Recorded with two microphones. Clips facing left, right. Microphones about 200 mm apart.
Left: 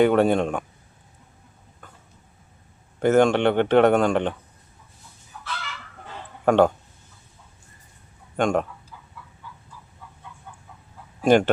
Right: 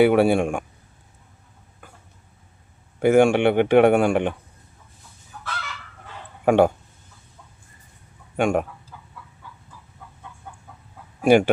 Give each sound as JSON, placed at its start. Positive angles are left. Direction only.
{"t": 0.0, "sound": "speech", "side_deg": -10}
{"t": 1.8, "sound": "a sound", "side_deg": -10}
{"t": 3.0, "sound": "speech", "side_deg": -10}
{"t": 6.4, "sound": "speech", "side_deg": -10}
{"t": 8.4, "sound": "speech", "side_deg": -10}
{"t": 11.2, "sound": "speech", "side_deg": -10}